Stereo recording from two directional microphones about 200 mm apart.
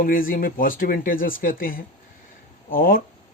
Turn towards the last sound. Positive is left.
turn(degrees=45)  # may be behind; listen again after turning